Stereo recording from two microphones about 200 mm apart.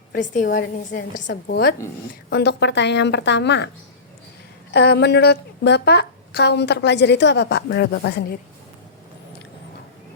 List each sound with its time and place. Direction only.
0.1 s a woman's voice: 40° left (ahead or behind); by 3.7 s 60° left (ahead or behind)
4.7 s a woman's voice: 55° left (ahead or behind)